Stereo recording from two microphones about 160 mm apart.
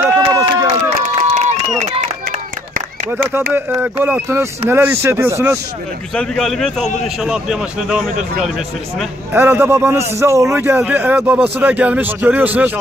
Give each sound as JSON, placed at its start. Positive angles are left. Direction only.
{"t": 0.3, "sound": "run", "side_deg": -20}
{"t": 1.0, "sound": "run", "side_deg": -45}
{"t": 3.5, "sound": "a man's voice", "side_deg": -10}
{"t": 6.1, "sound": "a man's voice", "side_deg": 5}